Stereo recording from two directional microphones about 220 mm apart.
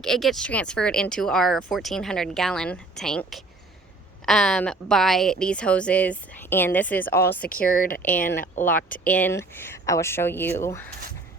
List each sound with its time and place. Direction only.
0.0 s speech: centre (ahead or behind)
7.4 s speech: 40° left (ahead or behind)
9.0 s speech: 5° left (ahead or behind)